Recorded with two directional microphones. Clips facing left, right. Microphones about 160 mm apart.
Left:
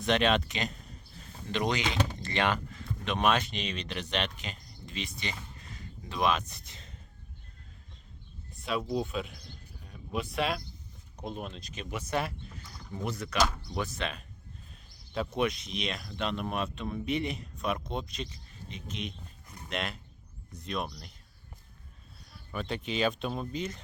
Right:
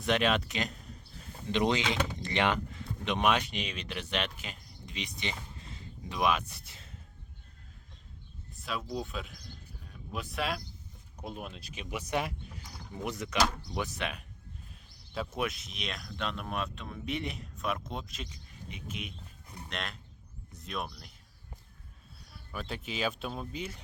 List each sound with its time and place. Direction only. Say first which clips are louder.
0.0 s speech: left 2 dB; 5° right (ahead or behind)
1.5 s speech: right 1 dB; 25° right (ahead or behind)
6.1 s speech: left 1 dB; 10° right (ahead or behind)
8.5 s a sound: left 5 dB; centre (ahead or behind)
8.9 s speech: left 5 dB; centre (ahead or behind)
9.8 s a sound: left 5 dB; centre (ahead or behind)
11.2 s speech: left 3 dB; 5° right (ahead or behind)
14.7 s a sound: left 5 dB; centre (ahead or behind)
15.4 s speech: left 6 dB; 5° right (ahead or behind)
18.7 s a sound: left 3 dB; 10° right (ahead or behind)
19.7 s speech: left 5 dB; 5° left (ahead or behind)
22.3 s speech: left 4 dB; 5° right (ahead or behind)